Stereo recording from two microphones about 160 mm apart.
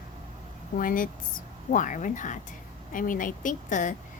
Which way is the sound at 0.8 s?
60° left (ahead or behind).